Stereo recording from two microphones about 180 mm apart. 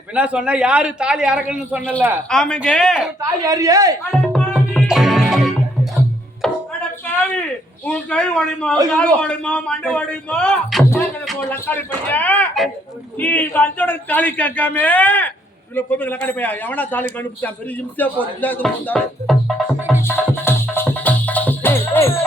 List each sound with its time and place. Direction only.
0.1 s speech: 5° right (ahead or behind)
3.2 s speech: 20° right (ahead or behind)
4.3 s music: centre (ahead or behind)
7.9 s speech: 5° left (ahead or behind)
10.8 s music: 15° left (ahead or behind)
11.3 s speech: 10° left (ahead or behind)
19.9 s music: 15° left (ahead or behind)